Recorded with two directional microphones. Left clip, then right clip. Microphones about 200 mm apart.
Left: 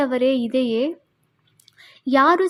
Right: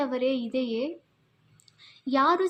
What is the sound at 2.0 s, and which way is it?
Speech, 40° left (ahead or behind).